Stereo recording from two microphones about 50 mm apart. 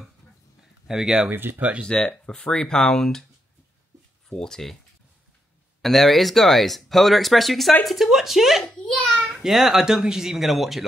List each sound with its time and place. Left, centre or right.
0.8 s speech: centre
1.3 s speech: right
1.6 s speech: right
1.9 s speech: centre
4.3 s speech: centre
5.8 s speech: centre